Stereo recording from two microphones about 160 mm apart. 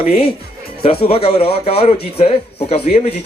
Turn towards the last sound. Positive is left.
turn(degrees=45)  # may be behind; listen again after turning